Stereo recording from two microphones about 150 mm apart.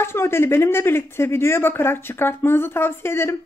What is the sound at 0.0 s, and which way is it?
A woman's voice, 15° left (ahead or behind).